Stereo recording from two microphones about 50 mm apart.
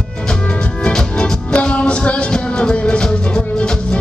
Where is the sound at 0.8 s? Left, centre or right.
Centre.